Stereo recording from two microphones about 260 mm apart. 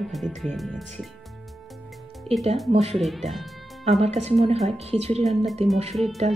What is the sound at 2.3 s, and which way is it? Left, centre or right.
Speech, right.